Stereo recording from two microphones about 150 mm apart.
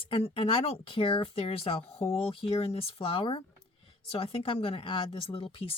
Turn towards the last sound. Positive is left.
turn(degrees=40)  # may be behind; listen again after turning